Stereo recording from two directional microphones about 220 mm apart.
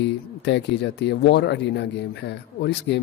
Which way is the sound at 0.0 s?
50° left (ahead or behind).